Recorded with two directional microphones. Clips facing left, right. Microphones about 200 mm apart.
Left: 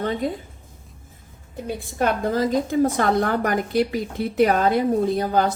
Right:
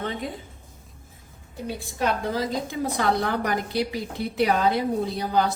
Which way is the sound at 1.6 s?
50° left (ahead or behind).